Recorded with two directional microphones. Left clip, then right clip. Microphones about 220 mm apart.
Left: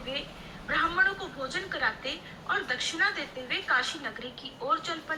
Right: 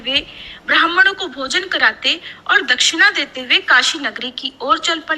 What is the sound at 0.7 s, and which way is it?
A woman's voice, 50° right (ahead or behind).